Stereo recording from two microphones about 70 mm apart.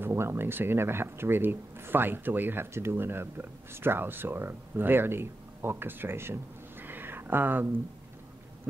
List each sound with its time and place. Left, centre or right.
0.0 s speech: right